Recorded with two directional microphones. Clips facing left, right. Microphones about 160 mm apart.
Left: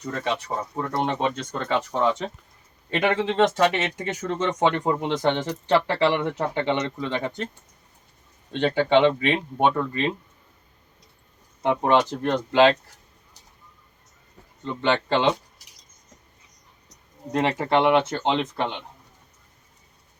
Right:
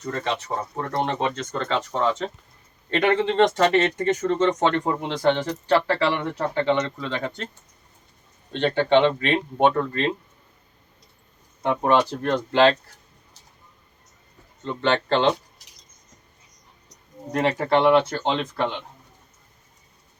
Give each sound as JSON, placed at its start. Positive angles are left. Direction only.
{"t": 0.1, "sound": "speech", "side_deg": 10}
{"t": 4.8, "sound": "speech", "side_deg": 20}
{"t": 8.5, "sound": "speech", "side_deg": 10}
{"t": 11.6, "sound": "speech", "side_deg": 20}
{"t": 14.8, "sound": "speech", "side_deg": 15}
{"t": 17.3, "sound": "speech", "side_deg": 20}